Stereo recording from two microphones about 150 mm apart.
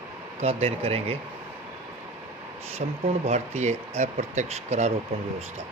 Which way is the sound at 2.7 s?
45° right (ahead or behind).